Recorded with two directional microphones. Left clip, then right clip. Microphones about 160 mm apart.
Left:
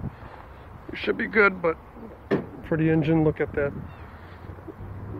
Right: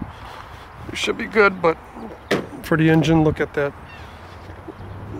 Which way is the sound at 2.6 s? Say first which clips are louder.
Right 6 dB; 70° right (ahead or behind).